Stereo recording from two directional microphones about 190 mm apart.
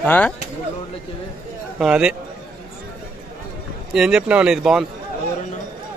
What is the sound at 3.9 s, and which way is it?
Speech, 5° right (ahead or behind).